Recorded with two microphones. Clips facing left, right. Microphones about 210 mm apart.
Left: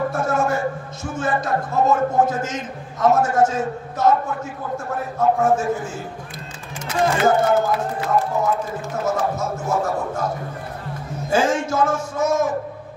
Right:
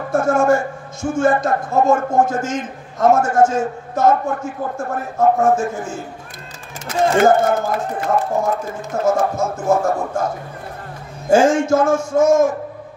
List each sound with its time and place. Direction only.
0.1 s a man's voice: 50° right (ahead or behind)
7.2 s a man's voice: 50° right (ahead or behind)
11.2 s a man's voice: 50° right (ahead or behind)